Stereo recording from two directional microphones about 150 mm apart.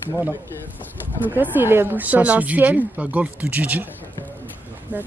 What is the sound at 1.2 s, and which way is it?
Speech, 10° right (ahead or behind).